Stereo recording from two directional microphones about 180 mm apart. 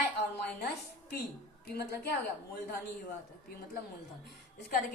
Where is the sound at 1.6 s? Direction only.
60° left (ahead or behind).